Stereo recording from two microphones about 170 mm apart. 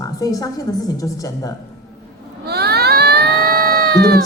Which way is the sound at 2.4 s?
70° right (ahead or behind).